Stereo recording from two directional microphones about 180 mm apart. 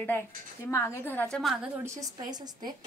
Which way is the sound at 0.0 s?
10° left (ahead or behind).